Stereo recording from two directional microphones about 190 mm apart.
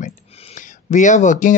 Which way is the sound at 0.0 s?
30° left (ahead or behind).